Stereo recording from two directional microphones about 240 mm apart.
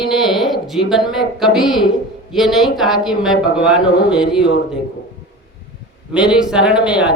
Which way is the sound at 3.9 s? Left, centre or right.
Centre.